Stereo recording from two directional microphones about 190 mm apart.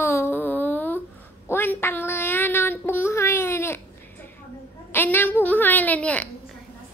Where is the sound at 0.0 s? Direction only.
15° left (ahead or behind).